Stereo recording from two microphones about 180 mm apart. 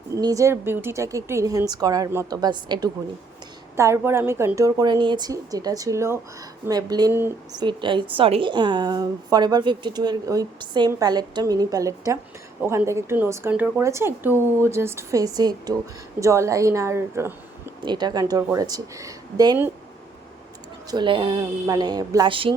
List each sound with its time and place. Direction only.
0.2 s a woman's voice: 20° right (ahead or behind)
7.6 s a woman's voice: 25° right (ahead or behind)
20.9 s a woman's voice: 25° right (ahead or behind)